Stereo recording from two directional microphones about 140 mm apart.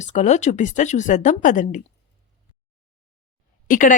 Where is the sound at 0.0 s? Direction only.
60° left (ahead or behind).